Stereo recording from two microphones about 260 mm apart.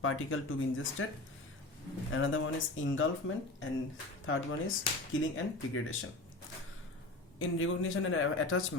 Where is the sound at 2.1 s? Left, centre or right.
Left.